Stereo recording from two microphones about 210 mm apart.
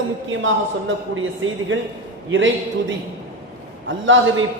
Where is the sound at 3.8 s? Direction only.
65° right (ahead or behind).